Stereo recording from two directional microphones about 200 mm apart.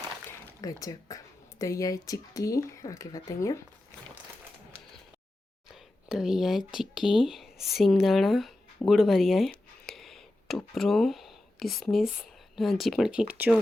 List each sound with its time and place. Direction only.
0.6 s speech: 20° left (ahead or behind)
5.6 s whispering: centre (ahead or behind)
6.7 s speech: centre (ahead or behind)
8.9 s a sound: centre (ahead or behind)
12.5 s speech: centre (ahead or behind)